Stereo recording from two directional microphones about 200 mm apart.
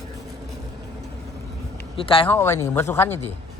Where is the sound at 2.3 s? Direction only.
15° left (ahead or behind).